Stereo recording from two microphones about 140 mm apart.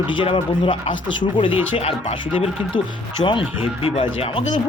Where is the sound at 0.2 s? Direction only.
40° left (ahead or behind).